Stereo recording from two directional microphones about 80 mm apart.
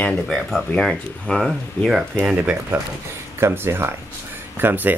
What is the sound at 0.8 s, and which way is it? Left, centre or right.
Speech, centre.